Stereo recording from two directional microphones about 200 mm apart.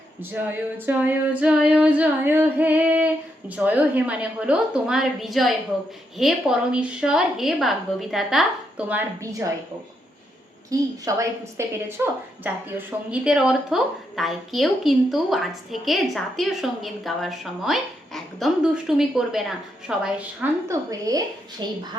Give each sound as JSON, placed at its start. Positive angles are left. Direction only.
{"t": 0.2, "sound": "female singing", "side_deg": -10}
{"t": 6.1, "sound": "a woman's voice", "side_deg": 0}
{"t": 8.9, "sound": "female singing", "side_deg": -10}
{"t": 10.7, "sound": "female singing", "side_deg": -15}
{"t": 13.1, "sound": "a woman's voice", "side_deg": -5}